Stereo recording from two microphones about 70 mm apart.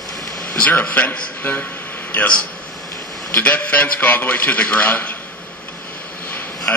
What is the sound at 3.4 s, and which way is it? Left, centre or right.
A man's voice, left.